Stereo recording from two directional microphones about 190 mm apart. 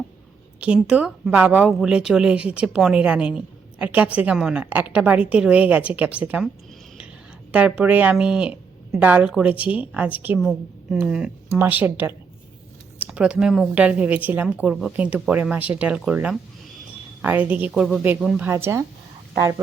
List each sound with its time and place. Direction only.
0.6 s speech: 5° right (ahead or behind)
7.5 s speech: 5° right (ahead or behind)